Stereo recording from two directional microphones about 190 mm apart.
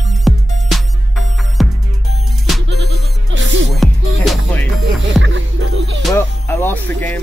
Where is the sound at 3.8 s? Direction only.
Centre (ahead or behind).